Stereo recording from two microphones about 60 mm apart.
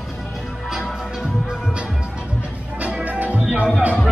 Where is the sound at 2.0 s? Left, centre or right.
Centre.